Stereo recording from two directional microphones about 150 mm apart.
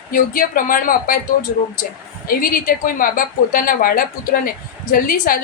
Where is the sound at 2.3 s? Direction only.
65° left (ahead or behind).